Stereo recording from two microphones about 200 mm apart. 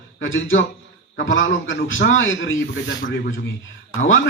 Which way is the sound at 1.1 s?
70° left (ahead or behind).